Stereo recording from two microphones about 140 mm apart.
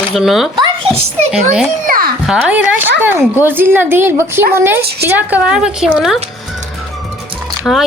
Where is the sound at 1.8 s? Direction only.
90° right.